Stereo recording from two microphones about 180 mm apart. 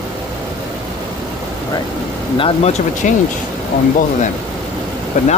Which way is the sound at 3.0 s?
45° left (ahead or behind).